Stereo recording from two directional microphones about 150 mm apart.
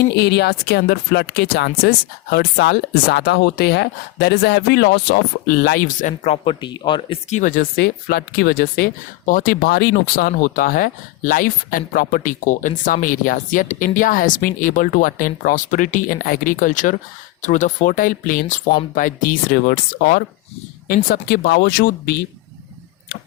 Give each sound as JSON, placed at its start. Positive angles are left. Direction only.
{"t": 0.0, "sound": "speech", "side_deg": 90}
{"t": 6.2, "sound": "speech", "side_deg": 35}
{"t": 7.3, "sound": "speech", "side_deg": 55}